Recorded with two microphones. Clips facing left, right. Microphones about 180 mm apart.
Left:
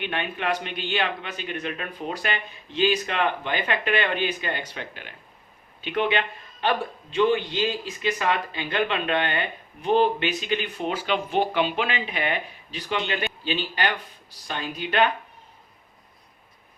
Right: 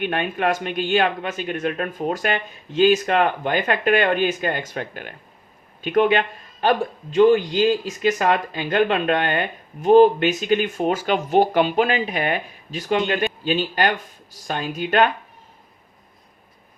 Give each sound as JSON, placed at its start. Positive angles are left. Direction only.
{"t": 0.0, "sound": "a man's voice", "side_deg": -45}